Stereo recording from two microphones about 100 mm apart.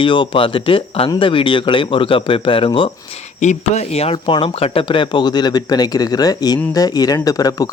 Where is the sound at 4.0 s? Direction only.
70° left (ahead or behind); by 7.6 s 40° left (ahead or behind).